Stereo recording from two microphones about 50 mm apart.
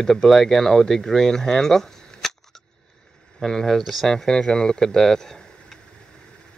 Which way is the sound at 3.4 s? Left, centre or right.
Centre.